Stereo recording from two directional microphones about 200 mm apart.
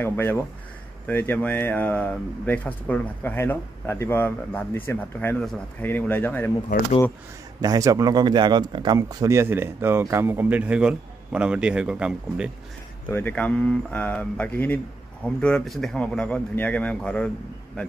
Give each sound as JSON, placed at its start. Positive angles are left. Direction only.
{"t": 0.0, "sound": "speech", "side_deg": 10}
{"t": 6.7, "sound": "speech", "side_deg": 45}
{"t": 7.6, "sound": "speech", "side_deg": -20}
{"t": 13.1, "sound": "speech", "side_deg": 10}